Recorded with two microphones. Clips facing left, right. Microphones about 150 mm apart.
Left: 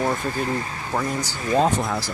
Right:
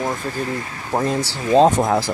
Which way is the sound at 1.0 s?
25° right (ahead or behind).